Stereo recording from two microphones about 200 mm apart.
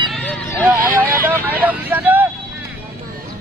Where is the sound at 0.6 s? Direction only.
10° right (ahead or behind).